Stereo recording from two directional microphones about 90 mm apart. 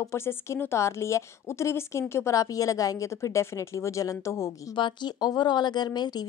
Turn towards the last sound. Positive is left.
turn(degrees=50)  # may be behind; listen again after turning